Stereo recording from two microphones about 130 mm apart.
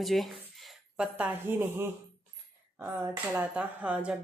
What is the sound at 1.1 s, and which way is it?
A woman's voice, 15° right (ahead or behind).